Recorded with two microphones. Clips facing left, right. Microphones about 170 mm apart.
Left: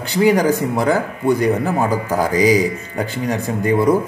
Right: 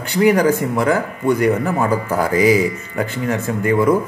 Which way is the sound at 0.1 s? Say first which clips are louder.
Right 1 dB; 30° left (ahead or behind).